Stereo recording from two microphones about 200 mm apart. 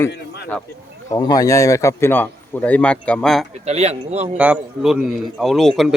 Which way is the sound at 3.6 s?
30° right (ahead or behind).